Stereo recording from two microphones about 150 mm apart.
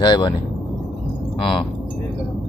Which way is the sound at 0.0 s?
30° left (ahead or behind).